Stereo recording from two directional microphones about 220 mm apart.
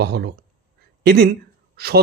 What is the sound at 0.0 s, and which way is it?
Speech, 45° right (ahead or behind).